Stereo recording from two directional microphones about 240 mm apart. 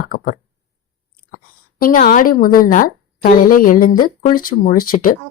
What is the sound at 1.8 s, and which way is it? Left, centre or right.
A woman's voice, left.